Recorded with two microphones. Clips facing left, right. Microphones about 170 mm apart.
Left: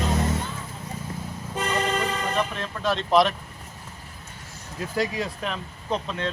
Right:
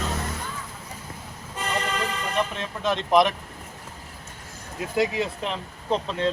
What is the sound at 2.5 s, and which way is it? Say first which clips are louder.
Speech: even; 20° right (ahead or behind).